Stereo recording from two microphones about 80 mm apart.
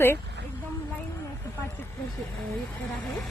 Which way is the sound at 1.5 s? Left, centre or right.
Left.